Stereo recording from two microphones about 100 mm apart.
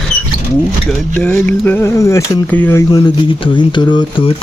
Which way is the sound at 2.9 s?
50° left (ahead or behind).